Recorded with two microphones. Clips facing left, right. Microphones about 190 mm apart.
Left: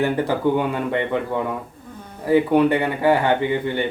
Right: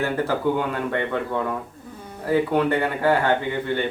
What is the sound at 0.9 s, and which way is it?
Speech, 15° left (ahead or behind).